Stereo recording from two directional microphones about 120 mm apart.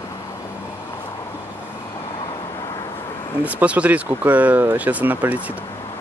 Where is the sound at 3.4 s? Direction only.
10° right (ahead or behind).